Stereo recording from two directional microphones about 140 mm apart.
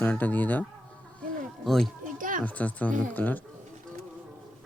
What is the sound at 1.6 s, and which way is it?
Speech, centre (ahead or behind).